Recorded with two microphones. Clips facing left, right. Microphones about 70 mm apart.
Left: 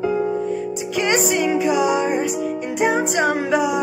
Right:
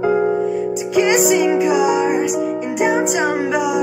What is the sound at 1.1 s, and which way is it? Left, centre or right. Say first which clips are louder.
Music: right 2 dB; centre.